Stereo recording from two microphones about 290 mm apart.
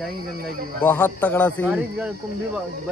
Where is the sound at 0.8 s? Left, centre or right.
Centre.